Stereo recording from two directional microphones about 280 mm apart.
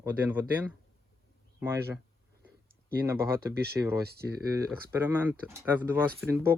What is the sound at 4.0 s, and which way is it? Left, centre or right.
Speech, right.